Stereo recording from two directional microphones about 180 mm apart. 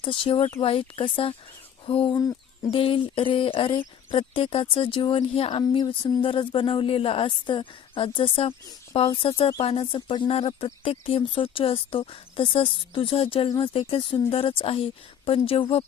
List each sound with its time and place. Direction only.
0.0 s speech: 30° left (ahead or behind)